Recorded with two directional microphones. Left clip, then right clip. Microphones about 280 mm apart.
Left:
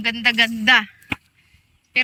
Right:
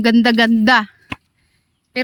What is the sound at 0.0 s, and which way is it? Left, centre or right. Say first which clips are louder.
Speech: right 4 dB; right.